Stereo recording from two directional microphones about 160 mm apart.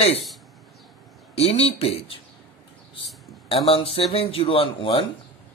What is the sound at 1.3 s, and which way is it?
Speech, 40° left (ahead or behind).